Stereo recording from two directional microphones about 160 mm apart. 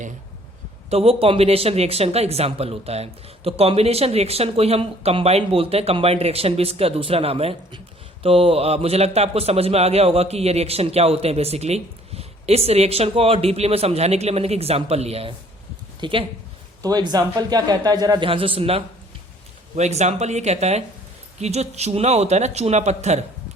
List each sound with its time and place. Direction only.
0.9 s a man's voice: 40° right (ahead or behind)